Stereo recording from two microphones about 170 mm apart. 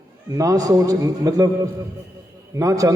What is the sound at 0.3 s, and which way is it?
A man's voice, 20° right (ahead or behind).